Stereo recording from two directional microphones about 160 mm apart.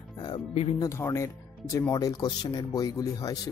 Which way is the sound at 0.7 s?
20° left (ahead or behind).